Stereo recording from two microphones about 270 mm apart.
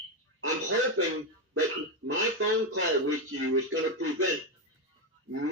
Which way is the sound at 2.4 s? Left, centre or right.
Right.